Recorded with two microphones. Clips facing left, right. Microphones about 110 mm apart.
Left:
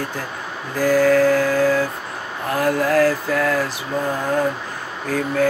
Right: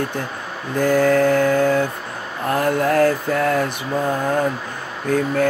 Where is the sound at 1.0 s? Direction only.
30° right (ahead or behind).